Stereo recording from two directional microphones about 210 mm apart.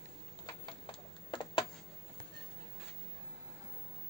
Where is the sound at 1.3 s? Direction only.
25° left (ahead or behind).